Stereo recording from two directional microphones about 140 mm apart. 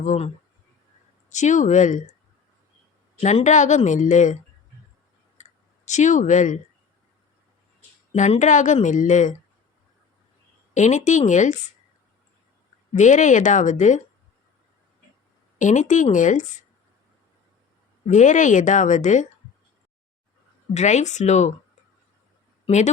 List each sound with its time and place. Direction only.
1.3 s a woman's voice: 60° left (ahead or behind)
3.2 s a woman's voice: 50° left (ahead or behind)
5.4 s tick: 60° left (ahead or behind)
8.1 s a woman's voice: 60° left (ahead or behind)
10.8 s a woman's voice: 60° left (ahead or behind)
12.9 s a woman's voice: 60° left (ahead or behind)
15.5 s a woman's voice: 60° left (ahead or behind)
18.0 s a woman's voice: 60° left (ahead or behind)
20.7 s a woman's voice: 60° left (ahead or behind)
22.6 s speech: 55° left (ahead or behind)